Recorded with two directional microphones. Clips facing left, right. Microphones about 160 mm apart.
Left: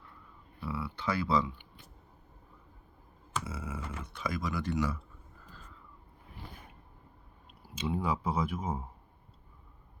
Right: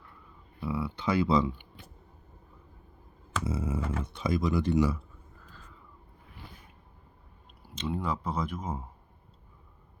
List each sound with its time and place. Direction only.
0.6 s speech: 15° right (ahead or behind)
3.4 s computer keyboard: 25° right (ahead or behind)
4.0 s speech: 25° right (ahead or behind)
7.6 s speech: 5° left (ahead or behind)